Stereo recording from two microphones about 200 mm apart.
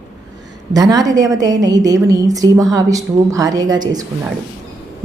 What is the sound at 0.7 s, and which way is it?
A woman's voice, 20° right (ahead or behind).